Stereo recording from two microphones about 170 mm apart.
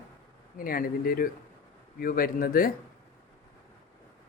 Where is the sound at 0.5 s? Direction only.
60° left (ahead or behind).